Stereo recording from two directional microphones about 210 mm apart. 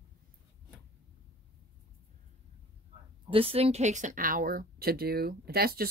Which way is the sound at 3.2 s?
25° right (ahead or behind).